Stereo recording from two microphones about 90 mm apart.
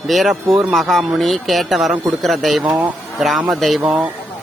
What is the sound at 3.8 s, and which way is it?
Speech, 15° right (ahead or behind).